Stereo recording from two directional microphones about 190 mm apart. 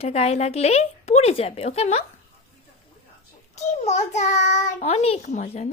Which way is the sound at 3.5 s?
35° left (ahead or behind).